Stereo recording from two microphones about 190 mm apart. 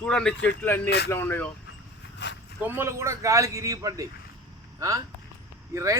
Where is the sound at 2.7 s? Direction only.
15° right (ahead or behind).